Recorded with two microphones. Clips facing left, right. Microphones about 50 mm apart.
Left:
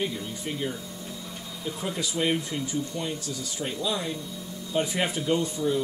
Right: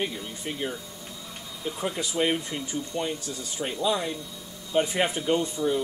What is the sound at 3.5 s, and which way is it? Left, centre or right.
Speech, centre.